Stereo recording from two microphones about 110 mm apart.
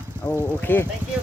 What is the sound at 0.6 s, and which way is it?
Speech, 20° left (ahead or behind).